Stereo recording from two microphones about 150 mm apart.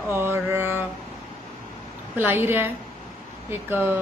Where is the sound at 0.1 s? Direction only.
15° right (ahead or behind).